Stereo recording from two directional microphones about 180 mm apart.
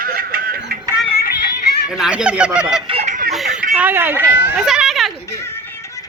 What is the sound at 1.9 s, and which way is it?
Honk, 5° right (ahead or behind).